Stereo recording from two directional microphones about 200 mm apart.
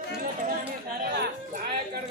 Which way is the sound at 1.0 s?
55° right (ahead or behind).